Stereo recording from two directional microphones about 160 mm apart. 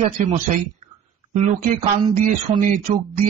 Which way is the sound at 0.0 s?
50° right (ahead or behind).